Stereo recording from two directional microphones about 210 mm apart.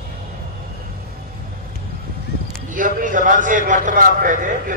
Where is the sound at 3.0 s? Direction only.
40° right (ahead or behind).